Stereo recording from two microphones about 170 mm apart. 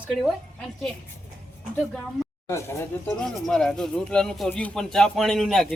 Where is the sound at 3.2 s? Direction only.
5° left (ahead or behind).